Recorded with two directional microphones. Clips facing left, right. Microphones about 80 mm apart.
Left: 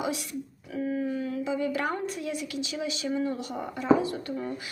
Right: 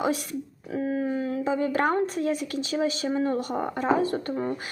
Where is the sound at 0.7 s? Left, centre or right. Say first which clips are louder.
Right 3 dB; right.